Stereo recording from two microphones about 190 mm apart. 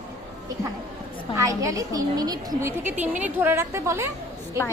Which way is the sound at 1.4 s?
15° right (ahead or behind).